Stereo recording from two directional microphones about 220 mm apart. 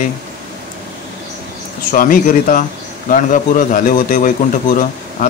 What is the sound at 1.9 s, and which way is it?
A man's voice, 40° left (ahead or behind).